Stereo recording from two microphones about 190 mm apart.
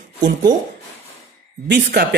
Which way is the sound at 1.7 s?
60° right (ahead or behind).